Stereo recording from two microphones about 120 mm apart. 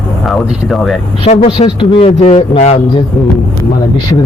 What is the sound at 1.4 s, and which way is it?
Speech, 45° left (ahead or behind).